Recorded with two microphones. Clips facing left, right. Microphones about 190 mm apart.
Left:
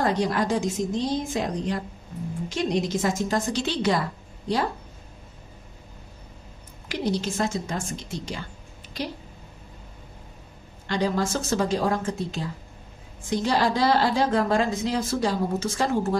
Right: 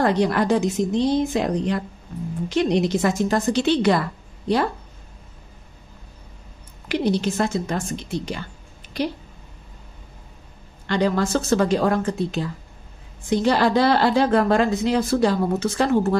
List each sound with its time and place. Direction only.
0.0 s a woman's voice: 65° right (ahead or behind)
6.9 s a woman's voice: 65° right (ahead or behind)
8.8 s a sound: 60° right (ahead or behind)
10.9 s a woman's voice: 65° right (ahead or behind)